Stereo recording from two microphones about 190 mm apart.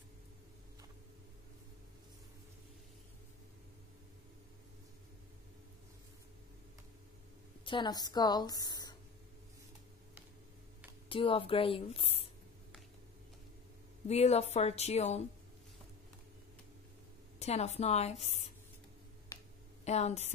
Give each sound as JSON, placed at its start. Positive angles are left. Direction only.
{"t": 7.6, "sound": "a woman's voice", "side_deg": 25}
{"t": 11.1, "sound": "a woman's voice", "side_deg": 30}
{"t": 14.0, "sound": "a woman's voice", "side_deg": 35}
{"t": 17.4, "sound": "a woman's voice", "side_deg": 35}
{"t": 19.8, "sound": "a woman's voice", "side_deg": 35}